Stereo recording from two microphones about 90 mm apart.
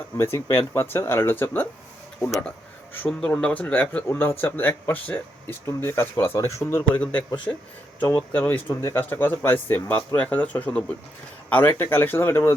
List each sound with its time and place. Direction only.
0.2 s speech: 30° left (ahead or behind)
3.1 s speech: 10° left (ahead or behind); by 7.0 s 25° left (ahead or behind)
7.0 s speech: 15° left (ahead or behind)